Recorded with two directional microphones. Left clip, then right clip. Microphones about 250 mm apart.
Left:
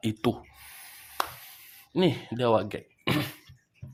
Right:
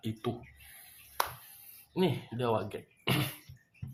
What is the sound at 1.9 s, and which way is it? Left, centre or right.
Speech, left.